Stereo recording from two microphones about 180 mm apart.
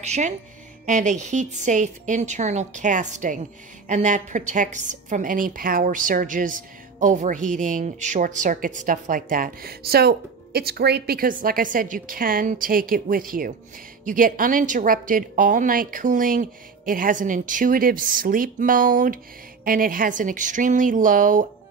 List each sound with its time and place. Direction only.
0.0 s speech: 40° right (ahead or behind)